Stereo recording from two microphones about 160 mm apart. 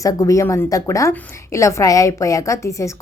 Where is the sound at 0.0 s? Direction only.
20° left (ahead or behind).